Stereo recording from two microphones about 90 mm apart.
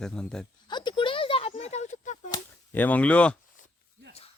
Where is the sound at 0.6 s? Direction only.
55° left (ahead or behind); by 1.5 s 85° left.